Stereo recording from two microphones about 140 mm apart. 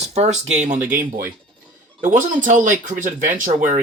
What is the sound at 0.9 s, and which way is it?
Speech, 75° right (ahead or behind).